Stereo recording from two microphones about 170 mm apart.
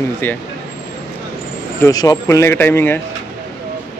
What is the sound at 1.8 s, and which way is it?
A man's voice, 20° left (ahead or behind).